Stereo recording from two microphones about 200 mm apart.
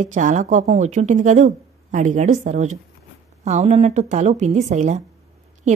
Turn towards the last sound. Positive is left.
turn(degrees=-35)  # may be behind; listen again after turning